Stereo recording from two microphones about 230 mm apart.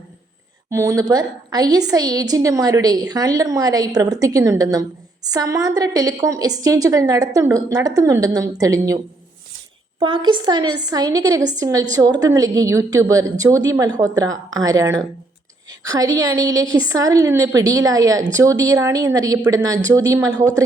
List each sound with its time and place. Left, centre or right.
0.7 s a woman's voice: centre
10.0 s a woman's voice: right